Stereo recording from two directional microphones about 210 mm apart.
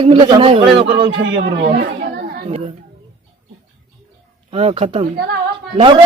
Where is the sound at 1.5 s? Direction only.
50° right (ahead or behind).